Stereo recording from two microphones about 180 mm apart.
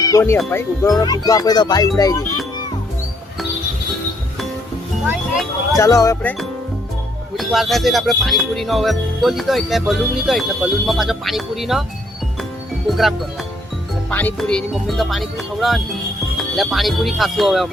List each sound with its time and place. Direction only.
0.0 s wind chime: 20° left (ahead or behind)
0.5 s speech: 15° left (ahead or behind)
5.7 s speech: 15° left (ahead or behind)
7.3 s speech: centre (ahead or behind)
12.9 s speech: centre (ahead or behind)